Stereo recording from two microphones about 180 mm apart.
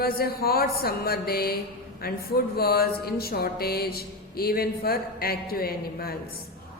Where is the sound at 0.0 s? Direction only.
55° left (ahead or behind).